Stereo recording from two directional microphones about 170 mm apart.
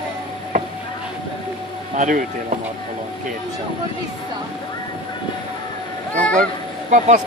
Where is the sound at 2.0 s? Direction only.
50° right (ahead or behind).